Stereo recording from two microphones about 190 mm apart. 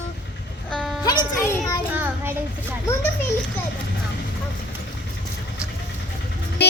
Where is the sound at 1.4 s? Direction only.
20° left (ahead or behind).